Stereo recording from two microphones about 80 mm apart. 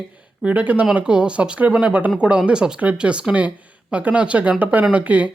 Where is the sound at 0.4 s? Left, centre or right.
Centre.